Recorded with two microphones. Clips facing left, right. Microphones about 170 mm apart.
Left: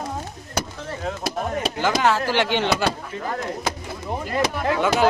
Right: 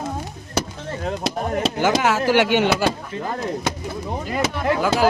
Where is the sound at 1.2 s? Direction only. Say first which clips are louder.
Right 3 dB; 25° right (ahead or behind).